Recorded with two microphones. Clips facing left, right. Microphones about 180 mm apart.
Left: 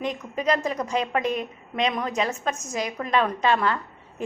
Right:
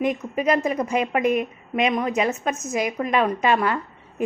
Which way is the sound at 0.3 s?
5° right (ahead or behind).